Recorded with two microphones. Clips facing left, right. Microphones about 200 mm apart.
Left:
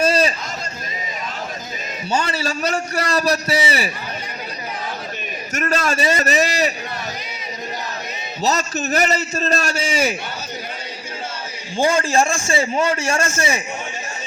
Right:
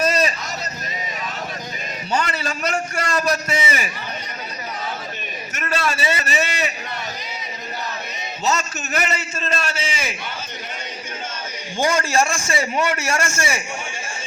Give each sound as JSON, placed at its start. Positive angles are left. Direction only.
{"t": 0.0, "sound": "hubbub", "side_deg": 30}
{"t": 2.1, "sound": "a man's voice", "side_deg": 30}
{"t": 5.5, "sound": "a man's voice", "side_deg": 40}
{"t": 8.4, "sound": "a man's voice", "side_deg": 35}
{"t": 11.8, "sound": "a man's voice", "side_deg": 30}